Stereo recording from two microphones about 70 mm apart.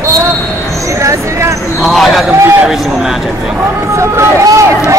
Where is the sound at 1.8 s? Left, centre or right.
Centre.